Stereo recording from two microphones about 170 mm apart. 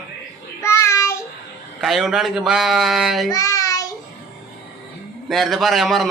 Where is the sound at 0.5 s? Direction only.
15° left (ahead or behind).